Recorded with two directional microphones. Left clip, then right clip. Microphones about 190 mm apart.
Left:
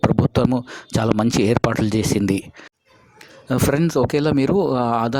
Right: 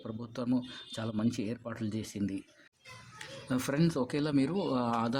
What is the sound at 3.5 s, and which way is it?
Speech, 40° left (ahead or behind).